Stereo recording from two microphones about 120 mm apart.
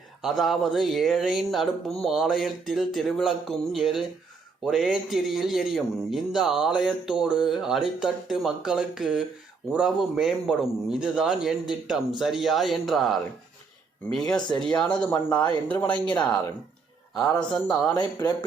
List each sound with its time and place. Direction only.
0.2 s a man's voice: centre (ahead or behind)
17.5 s speech: 10° left (ahead or behind)